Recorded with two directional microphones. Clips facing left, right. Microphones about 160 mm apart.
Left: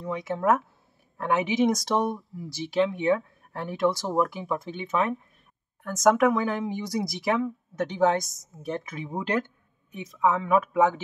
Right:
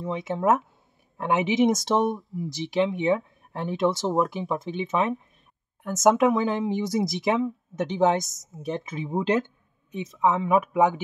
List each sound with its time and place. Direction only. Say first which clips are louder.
0.0 s speech: right 1 dB; 25° right (ahead or behind)